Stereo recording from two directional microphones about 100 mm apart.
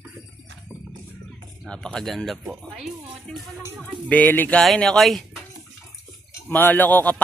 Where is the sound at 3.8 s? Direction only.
15° left (ahead or behind).